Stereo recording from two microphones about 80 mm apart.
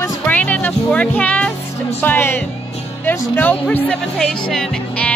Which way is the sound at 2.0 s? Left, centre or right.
Left.